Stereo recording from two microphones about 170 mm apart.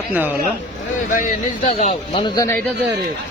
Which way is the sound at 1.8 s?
35° left (ahead or behind).